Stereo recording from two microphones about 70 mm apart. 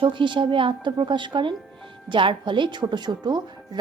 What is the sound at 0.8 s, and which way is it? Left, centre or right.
Speech, right.